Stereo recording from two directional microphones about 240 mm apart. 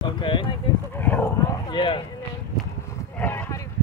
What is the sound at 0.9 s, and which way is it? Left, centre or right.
Dog, centre.